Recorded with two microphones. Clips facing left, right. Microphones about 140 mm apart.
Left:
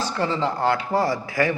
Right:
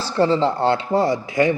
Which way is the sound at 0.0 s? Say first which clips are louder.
Right 6 dB; 30° right (ahead or behind).